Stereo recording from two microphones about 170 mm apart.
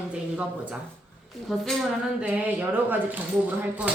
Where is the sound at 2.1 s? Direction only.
5° right (ahead or behind).